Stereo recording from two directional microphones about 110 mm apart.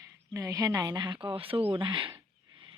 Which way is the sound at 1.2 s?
55° right (ahead or behind).